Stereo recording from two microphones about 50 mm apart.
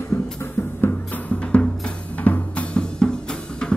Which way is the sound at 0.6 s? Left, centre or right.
Left.